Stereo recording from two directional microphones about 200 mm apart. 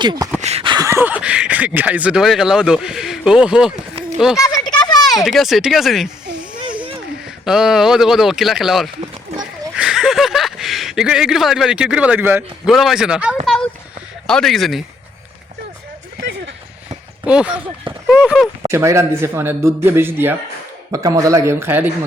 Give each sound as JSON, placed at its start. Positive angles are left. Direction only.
{"t": 0.0, "sound": "speech", "side_deg": -20}
{"t": 4.4, "sound": "children playing", "side_deg": 20}
{"t": 5.2, "sound": "a sound", "side_deg": 0}
{"t": 7.4, "sound": "speech", "side_deg": -5}
{"t": 17.2, "sound": "speech", "side_deg": -5}
{"t": 18.6, "sound": "a man's voice", "side_deg": -15}